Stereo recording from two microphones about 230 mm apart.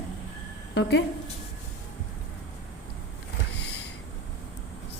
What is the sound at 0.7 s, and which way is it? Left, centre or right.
Speech, left.